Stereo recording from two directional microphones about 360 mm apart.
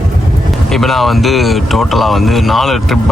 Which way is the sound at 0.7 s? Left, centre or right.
Centre.